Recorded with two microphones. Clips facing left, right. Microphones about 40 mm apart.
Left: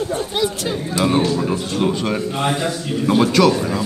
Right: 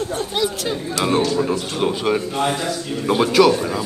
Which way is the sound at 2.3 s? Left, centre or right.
Centre.